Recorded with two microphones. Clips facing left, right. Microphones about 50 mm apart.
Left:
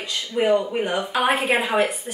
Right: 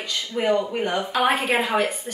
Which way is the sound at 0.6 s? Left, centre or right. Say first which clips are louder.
Even; centre.